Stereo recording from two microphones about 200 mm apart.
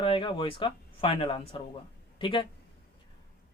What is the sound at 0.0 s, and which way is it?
Speech, 25° left (ahead or behind).